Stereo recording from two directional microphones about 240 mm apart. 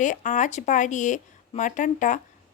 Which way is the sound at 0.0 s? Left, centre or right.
Left.